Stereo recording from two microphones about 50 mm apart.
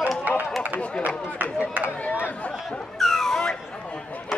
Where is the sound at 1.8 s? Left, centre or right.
Right.